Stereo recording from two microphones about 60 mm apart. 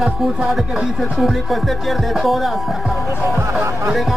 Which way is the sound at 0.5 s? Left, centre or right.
Centre.